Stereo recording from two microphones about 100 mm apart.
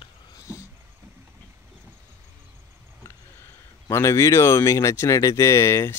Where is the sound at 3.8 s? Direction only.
30° left (ahead or behind).